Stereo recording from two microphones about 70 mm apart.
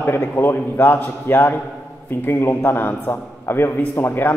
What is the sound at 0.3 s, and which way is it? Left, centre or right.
A man's voice, left.